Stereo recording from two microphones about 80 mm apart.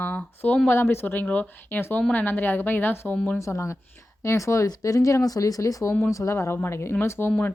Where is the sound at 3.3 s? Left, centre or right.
Left.